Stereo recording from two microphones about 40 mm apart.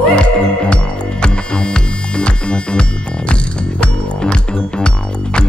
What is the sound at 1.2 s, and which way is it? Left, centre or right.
Music, left.